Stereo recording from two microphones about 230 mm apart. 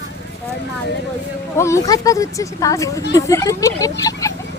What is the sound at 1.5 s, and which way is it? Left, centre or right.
Speech, centre.